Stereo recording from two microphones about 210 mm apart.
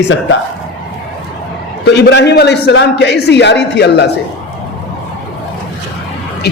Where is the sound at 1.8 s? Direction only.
55° left (ahead or behind).